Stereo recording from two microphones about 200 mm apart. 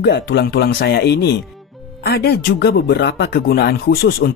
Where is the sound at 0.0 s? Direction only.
55° left (ahead or behind).